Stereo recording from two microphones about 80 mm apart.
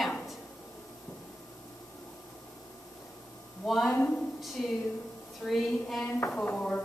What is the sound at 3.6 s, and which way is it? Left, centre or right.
Speech, centre.